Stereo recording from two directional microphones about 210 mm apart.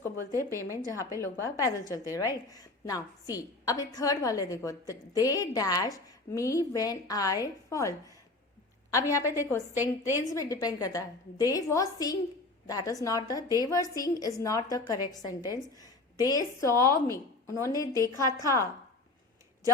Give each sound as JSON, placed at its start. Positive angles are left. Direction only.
{"t": 0.3, "sound": "a woman's voice", "side_deg": -15}
{"t": 0.9, "sound": "a woman's voice", "side_deg": 15}
{"t": 9.7, "sound": "a woman's voice", "side_deg": -10}
{"t": 10.2, "sound": "a woman's voice", "side_deg": 15}